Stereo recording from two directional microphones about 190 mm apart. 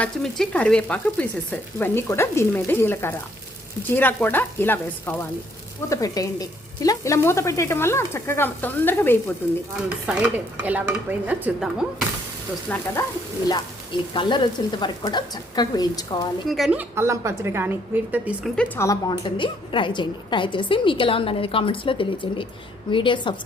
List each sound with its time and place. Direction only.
0.0 s speech: 5° left (ahead or behind)
10.1 s speech: 5° right (ahead or behind)
12.6 s speech: 10° left (ahead or behind)
14.1 s a woman's voice: 25° left (ahead or behind)
16.5 s a woman's voice: centre (ahead or behind)
16.9 s speech: 15° right (ahead or behind)
18.5 s speech: 5° left (ahead or behind)
18.9 s a woman's voice: 20° left (ahead or behind)